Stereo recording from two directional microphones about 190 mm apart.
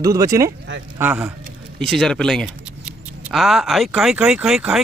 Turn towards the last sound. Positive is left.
turn(degrees=-5)  # may be behind; listen again after turning